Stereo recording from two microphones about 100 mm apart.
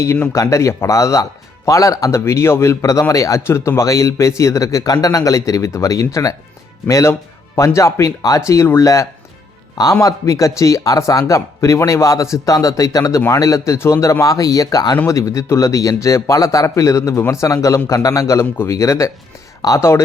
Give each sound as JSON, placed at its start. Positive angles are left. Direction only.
{"t": 0.3, "sound": "speech", "side_deg": 30}